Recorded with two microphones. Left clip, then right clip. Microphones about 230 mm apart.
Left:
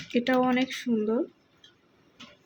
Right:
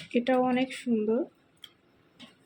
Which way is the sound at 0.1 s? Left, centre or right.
Centre.